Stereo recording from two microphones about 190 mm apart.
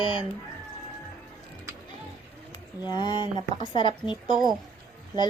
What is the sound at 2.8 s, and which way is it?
Speech, 25° left (ahead or behind).